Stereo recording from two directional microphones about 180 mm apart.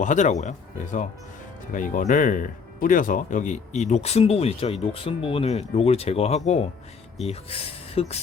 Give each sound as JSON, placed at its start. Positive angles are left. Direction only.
{"t": 0.0, "sound": "speech", "side_deg": 45}
{"t": 7.9, "sound": "speech", "side_deg": 35}